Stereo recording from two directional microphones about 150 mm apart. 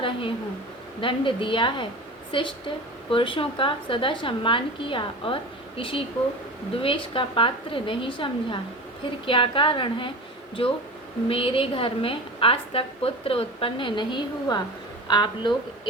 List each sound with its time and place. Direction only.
0.0 s a woman's voice: 35° left (ahead or behind)